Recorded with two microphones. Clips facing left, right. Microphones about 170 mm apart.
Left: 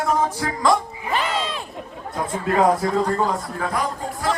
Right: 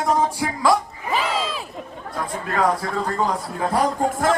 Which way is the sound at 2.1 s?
25° left (ahead or behind).